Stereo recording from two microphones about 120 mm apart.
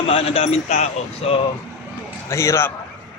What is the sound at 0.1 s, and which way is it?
Speech, 55° left (ahead or behind).